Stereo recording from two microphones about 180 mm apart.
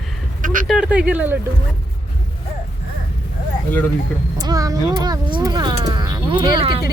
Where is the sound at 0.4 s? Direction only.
50° right (ahead or behind).